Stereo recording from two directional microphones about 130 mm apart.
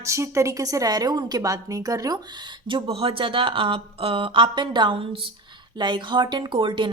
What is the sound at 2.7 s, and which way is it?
A woman's voice, 45° right (ahead or behind).